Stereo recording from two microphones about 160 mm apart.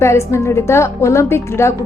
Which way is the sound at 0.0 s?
15° left (ahead or behind).